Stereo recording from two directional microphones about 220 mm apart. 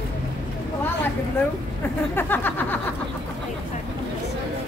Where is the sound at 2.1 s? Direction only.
10° left (ahead or behind).